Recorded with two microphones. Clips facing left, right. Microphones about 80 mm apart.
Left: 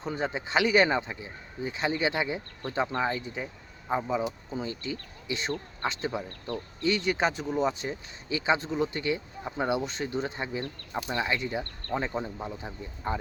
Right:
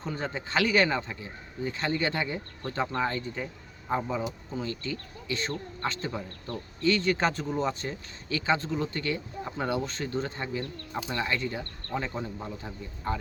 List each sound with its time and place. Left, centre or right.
0.0 s a man's voice: centre